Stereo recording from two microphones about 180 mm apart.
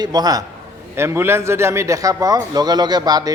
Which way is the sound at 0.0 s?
20° right (ahead or behind).